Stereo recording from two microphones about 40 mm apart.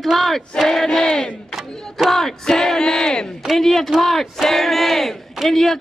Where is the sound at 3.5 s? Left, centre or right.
Centre.